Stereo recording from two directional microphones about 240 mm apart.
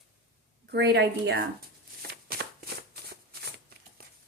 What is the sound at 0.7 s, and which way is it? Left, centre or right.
Speech, right.